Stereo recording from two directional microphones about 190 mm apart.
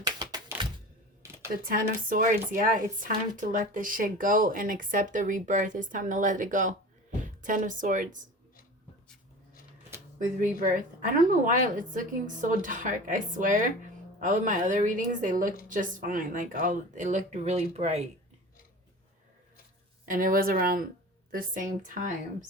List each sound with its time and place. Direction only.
0.0 s typewriter: 20° right (ahead or behind)
2.0 s speech: 45° right (ahead or behind)
10.7 s speech: 45° right (ahead or behind)
20.1 s speech: 45° right (ahead or behind)